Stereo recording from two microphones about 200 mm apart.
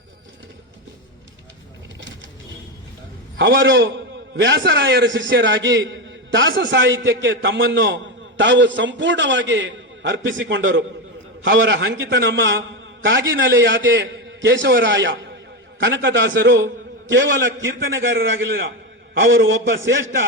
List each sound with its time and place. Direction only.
3.3 s a man's voice: 65° right (ahead or behind)